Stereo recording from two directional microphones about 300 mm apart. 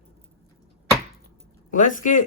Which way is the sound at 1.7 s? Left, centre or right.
Left.